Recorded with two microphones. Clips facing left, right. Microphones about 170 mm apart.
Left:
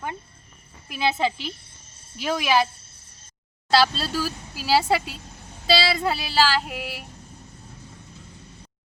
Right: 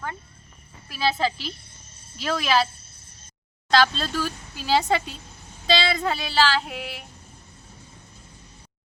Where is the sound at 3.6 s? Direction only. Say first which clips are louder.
Even; 5° left (ahead or behind).